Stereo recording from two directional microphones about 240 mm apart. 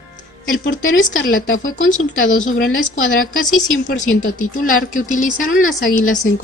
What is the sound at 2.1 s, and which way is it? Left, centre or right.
Speech, left.